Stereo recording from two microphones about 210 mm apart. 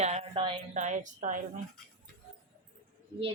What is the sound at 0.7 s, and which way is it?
Speech, 35° right (ahead or behind).